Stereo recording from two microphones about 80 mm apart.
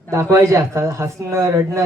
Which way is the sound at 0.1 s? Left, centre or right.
Right.